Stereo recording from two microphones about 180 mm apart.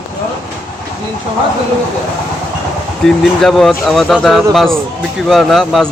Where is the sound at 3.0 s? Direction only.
Centre (ahead or behind).